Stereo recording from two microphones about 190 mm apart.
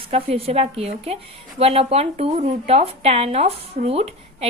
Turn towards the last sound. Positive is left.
turn(degrees=-30)  # may be behind; listen again after turning